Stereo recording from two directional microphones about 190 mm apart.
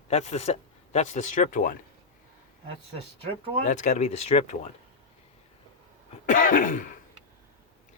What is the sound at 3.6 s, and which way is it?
Speech, 40° left (ahead or behind).